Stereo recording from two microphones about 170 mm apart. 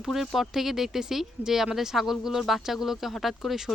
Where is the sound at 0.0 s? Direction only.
Centre (ahead or behind).